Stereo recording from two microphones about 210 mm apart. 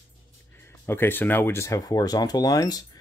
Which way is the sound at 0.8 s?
10° left (ahead or behind).